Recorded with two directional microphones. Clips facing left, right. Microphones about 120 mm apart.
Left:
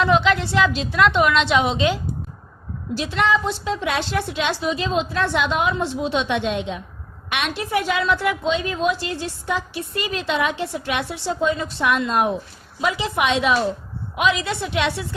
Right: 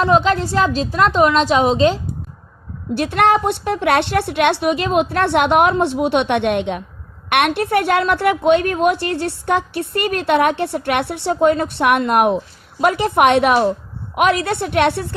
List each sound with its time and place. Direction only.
0.0 s a woman's voice: 40° right (ahead or behind)
2.9 s a woman's voice: 55° right (ahead or behind)
12.8 s a woman's voice: 55° right (ahead or behind)